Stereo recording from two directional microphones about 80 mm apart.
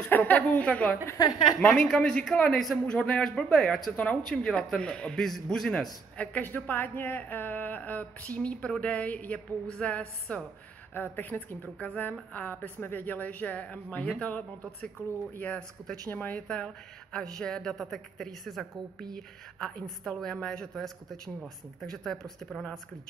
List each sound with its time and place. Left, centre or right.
0.1 s a man's voice: left
1.2 s a woman's voice: left
1.7 s a man's voice: centre
3.9 s a man's voice: centre
6.1 s a woman's voice: left; by 19.0 s centre
20.1 s a man's voice: centre